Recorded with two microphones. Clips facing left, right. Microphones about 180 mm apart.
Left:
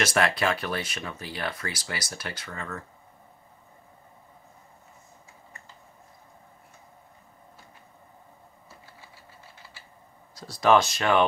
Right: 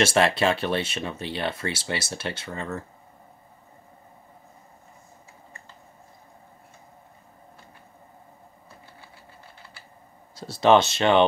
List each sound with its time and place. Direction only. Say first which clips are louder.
0.0 s speech: right 4 dB; 30° right (ahead or behind)
10.3 s speech: right 3 dB; 25° right (ahead or behind)